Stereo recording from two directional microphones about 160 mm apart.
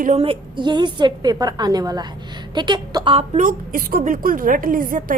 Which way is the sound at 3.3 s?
55° right (ahead or behind).